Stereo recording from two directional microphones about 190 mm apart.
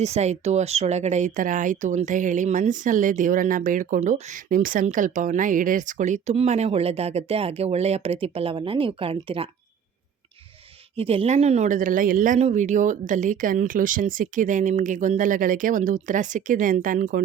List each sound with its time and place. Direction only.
0.0 s speech: 35° right (ahead or behind)
10.9 s speech: 30° right (ahead or behind)